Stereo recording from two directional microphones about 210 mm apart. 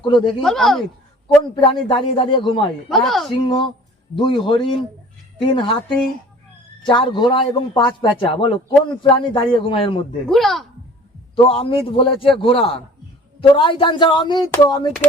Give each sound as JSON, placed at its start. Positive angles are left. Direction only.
{"t": 0.0, "sound": "a man's voice", "side_deg": 20}
{"t": 0.4, "sound": "speech", "side_deg": 0}
{"t": 1.6, "sound": "a man's voice", "side_deg": 25}
{"t": 2.9, "sound": "speech", "side_deg": 0}
{"t": 3.3, "sound": "a man's voice", "side_deg": 20}
{"t": 6.8, "sound": "a man's voice", "side_deg": 20}
{"t": 10.2, "sound": "speech", "side_deg": 0}
{"t": 11.3, "sound": "a man's voice", "side_deg": 25}